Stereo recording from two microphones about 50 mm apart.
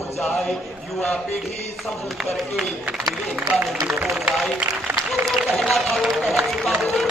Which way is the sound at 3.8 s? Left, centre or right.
Right.